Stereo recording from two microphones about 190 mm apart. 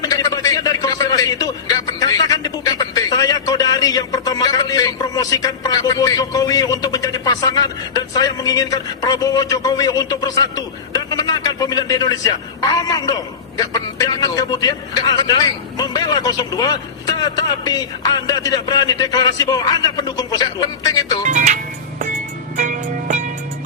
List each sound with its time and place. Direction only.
0.0 s a man's voice: 20° left (ahead or behind)
21.2 s music: 40° right (ahead or behind)